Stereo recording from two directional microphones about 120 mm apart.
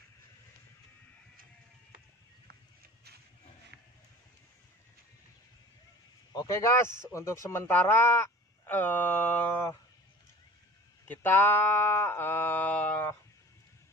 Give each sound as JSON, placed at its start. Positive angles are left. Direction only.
{"t": 6.3, "sound": "speech", "side_deg": 25}
{"t": 11.1, "sound": "speech", "side_deg": 15}